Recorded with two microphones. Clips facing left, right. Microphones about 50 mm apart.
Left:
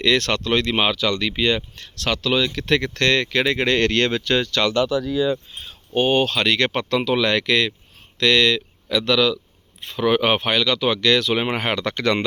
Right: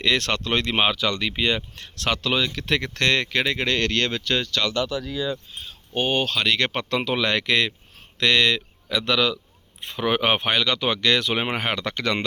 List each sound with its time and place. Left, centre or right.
0.0 s speech: centre
1.7 s speech: right
2.5 s speech: centre
3.4 s speech: centre
4.2 s speech: centre
5.3 s speech: left
5.9 s speech: centre
6.3 s speech: centre; by 11.5 s right
11.5 s speech: centre